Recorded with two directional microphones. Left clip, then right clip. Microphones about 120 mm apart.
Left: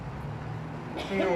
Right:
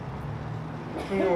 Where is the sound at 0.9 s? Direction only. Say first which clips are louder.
Right 2 dB; 15° left (ahead or behind).